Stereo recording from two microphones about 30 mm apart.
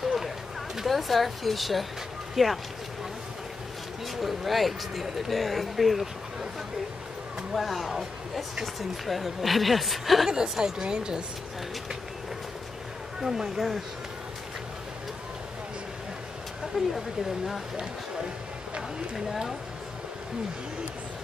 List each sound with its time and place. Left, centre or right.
0.0 s a sound: centre
0.8 s speech: centre
4.2 s speech: centre
7.5 s speech: centre
9.0 s speech: centre
10.6 s speech: right
13.2 s speech: centre
16.8 s speech: centre
19.1 s speech: centre